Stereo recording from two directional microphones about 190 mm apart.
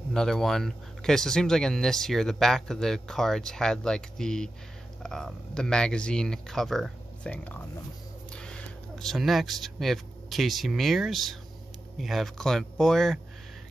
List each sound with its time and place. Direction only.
0.1 s speech: 5° left (ahead or behind)